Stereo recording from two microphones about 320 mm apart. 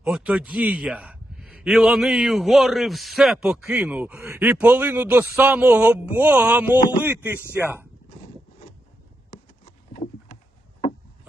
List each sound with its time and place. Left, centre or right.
0.0 s a man's voice: centre
8.1 s wood: left
9.3 s a sound: left